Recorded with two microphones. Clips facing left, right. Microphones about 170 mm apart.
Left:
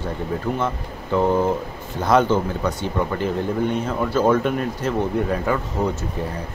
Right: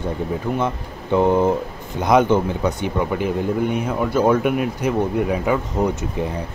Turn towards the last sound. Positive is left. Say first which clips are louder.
# right 2 dB
turn(degrees=-15)  # may be behind; listen again after turning